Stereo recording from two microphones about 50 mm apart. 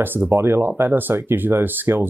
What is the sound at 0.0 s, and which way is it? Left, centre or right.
Speech, right.